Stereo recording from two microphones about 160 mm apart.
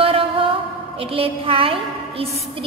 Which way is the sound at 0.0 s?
35° right (ahead or behind).